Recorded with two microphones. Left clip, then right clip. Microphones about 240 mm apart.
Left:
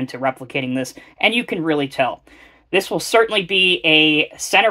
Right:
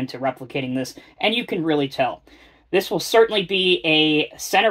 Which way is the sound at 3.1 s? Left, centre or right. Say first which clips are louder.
Even; left.